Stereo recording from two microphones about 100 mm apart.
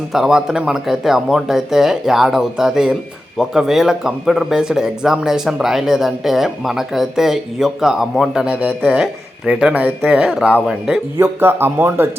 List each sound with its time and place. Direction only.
0.1 s speech: 5° right (ahead or behind)
11.2 s speech: 20° right (ahead or behind)